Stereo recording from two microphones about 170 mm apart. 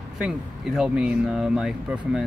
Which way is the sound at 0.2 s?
5° right (ahead or behind).